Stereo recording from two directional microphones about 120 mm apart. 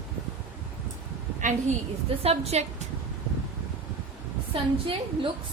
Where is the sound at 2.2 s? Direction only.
60° right (ahead or behind).